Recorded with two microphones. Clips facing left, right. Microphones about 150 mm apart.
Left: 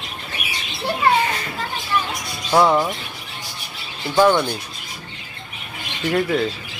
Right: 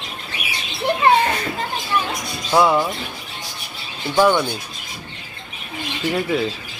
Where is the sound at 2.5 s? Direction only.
5° right (ahead or behind).